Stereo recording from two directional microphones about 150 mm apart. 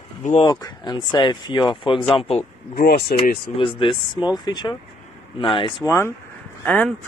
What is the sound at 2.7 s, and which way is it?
Speech, 90° left.